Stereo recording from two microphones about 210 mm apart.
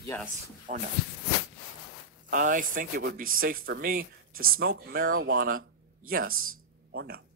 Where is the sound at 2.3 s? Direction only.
40° right (ahead or behind).